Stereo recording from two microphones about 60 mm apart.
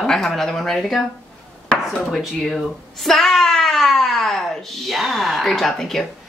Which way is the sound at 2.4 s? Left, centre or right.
Centre.